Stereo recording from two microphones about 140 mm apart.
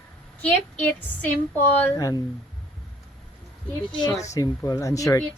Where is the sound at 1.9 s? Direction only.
25° left (ahead or behind).